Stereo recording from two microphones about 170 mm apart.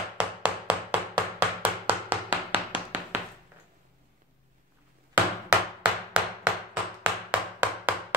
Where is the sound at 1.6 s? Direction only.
10° right (ahead or behind).